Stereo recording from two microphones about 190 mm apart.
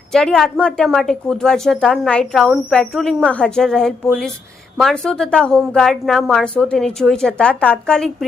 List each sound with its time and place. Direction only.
0.1 s a woman's voice: 5° left (ahead or behind)